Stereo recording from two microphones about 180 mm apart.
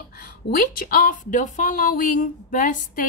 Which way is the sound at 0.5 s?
50° left (ahead or behind).